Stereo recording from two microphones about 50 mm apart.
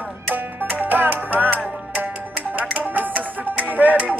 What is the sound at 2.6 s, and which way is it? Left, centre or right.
Music, right.